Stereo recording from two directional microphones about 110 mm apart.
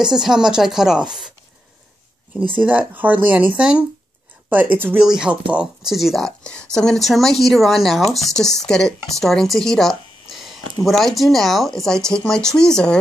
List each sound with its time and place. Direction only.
0.0 s speech: 5° right (ahead or behind)
2.3 s speech: 15° right (ahead or behind); by 12.9 s 5° left (ahead or behind)